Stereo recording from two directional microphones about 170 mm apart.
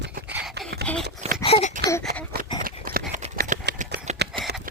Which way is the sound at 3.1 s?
50° right (ahead or behind).